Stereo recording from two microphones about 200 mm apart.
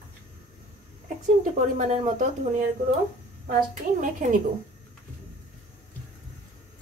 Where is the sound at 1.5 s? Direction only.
35° right (ahead or behind).